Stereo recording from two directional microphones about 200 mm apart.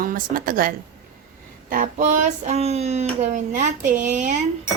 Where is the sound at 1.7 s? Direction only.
40° right (ahead or behind).